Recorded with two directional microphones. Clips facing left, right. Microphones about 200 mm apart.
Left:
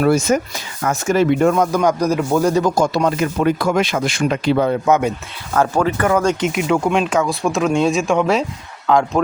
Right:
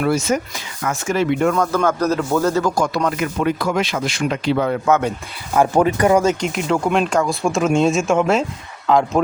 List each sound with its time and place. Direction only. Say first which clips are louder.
0.0 s speech: left 3 dB; 50° left (ahead or behind)
1.5 s speech: left 2 dB; 15° left (ahead or behind)
3.4 s speech: left 3 dB; 50° left (ahead or behind)
4.5 s speech: left 2 dB; 30° left (ahead or behind)
4.9 s speech: even; 10° left (ahead or behind)
5.5 s speech: right 2 dB; 15° right (ahead or behind)
6.5 s speech: left 2 dB; 5° left (ahead or behind)